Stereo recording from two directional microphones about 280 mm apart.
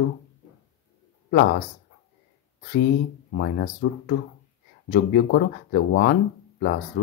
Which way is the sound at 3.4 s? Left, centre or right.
Left.